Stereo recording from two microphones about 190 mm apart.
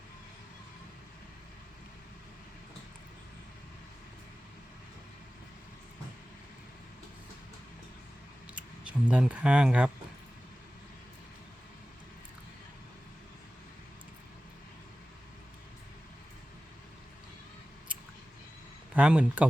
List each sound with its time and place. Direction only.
8.5 s speech: 5° right (ahead or behind)
18.9 s speech: 5° right (ahead or behind)